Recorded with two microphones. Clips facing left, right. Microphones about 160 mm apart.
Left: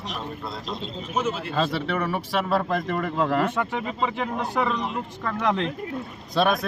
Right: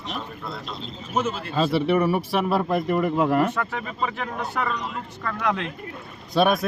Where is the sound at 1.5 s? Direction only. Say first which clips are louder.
Right 7 dB; 10° right (ahead or behind).